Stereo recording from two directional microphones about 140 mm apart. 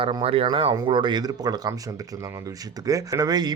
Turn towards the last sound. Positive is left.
turn(degrees=-30)  # may be behind; listen again after turning